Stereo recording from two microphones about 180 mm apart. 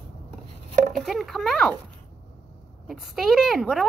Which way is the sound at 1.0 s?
Centre (ahead or behind).